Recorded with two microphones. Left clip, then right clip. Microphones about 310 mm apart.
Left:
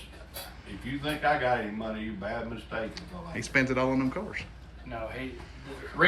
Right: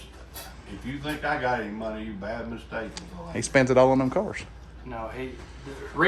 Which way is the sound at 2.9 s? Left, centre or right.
Centre.